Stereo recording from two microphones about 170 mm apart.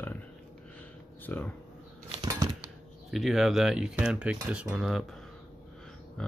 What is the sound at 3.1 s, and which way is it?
Speech, centre (ahead or behind).